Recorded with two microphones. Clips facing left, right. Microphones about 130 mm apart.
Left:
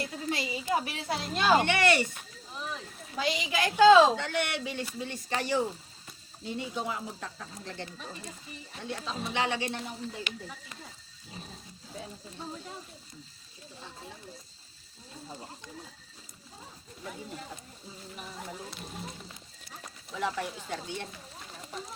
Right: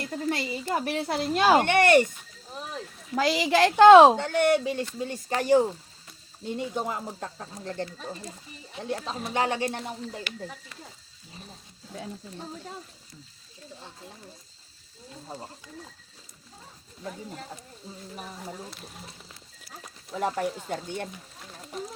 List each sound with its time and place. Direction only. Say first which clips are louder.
0.1 s speech: right 4 dB; 50° right (ahead or behind)
3.2 s a woman's voice: right 8 dB; 90° right; by 4.1 s 65° right (ahead or behind)
4.1 s speech: right 9 dB; 45° right (ahead or behind)
8.8 s speech: right 4 dB; 40° right (ahead or behind)
10.3 s speech: right 1 dB; 20° left (ahead or behind)
20.1 s speech: right 5 dB; 45° right (ahead or behind)